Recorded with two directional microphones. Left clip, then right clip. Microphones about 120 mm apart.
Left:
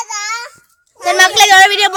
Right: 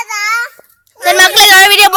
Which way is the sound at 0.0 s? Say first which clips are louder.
Right 7 dB; 45° left (ahead or behind).